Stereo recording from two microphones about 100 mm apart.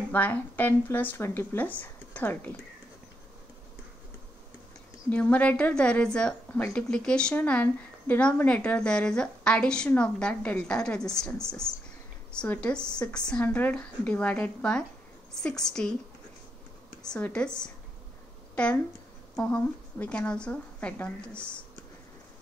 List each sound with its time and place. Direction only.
0.1 s speech: 15° left (ahead or behind)
5.1 s speech: 15° left (ahead or behind)
17.0 s speech: 10° left (ahead or behind)
18.5 s a sound: 10° left (ahead or behind)
19.3 s speech: 15° left (ahead or behind)